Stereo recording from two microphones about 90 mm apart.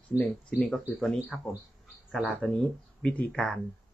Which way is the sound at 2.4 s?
15° left (ahead or behind).